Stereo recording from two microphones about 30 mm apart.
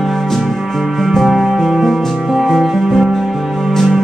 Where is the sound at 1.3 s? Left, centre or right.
Centre.